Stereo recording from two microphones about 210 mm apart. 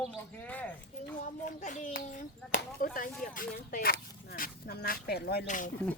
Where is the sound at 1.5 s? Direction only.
35° left (ahead or behind).